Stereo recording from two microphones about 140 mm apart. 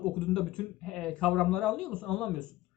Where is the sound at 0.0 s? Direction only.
5° left (ahead or behind).